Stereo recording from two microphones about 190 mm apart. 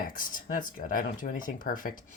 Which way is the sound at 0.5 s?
45° left (ahead or behind).